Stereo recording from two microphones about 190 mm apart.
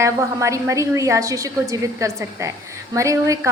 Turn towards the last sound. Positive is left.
turn(degrees=-15)  # may be behind; listen again after turning